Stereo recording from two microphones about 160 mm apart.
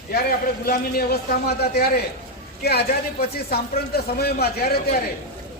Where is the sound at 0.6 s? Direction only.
65° left (ahead or behind).